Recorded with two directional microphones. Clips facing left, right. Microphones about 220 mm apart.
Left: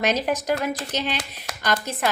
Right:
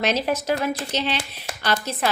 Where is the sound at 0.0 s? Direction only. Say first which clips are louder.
Even; 15° left (ahead or behind).